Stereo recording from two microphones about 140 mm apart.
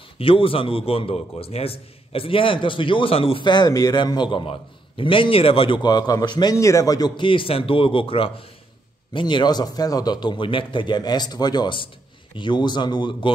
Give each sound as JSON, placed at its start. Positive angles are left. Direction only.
{"t": 0.2, "sound": "a man's voice", "side_deg": 40}